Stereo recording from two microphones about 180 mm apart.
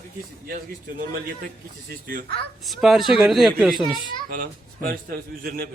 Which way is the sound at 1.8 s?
55° right (ahead or behind).